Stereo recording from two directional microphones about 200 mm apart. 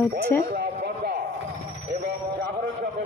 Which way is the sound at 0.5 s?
50° right (ahead or behind).